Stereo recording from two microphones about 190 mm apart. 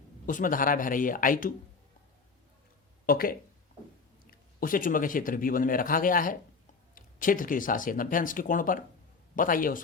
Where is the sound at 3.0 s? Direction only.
50° left (ahead or behind).